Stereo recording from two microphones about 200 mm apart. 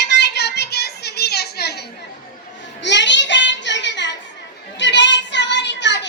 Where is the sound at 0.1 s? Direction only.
60° left (ahead or behind).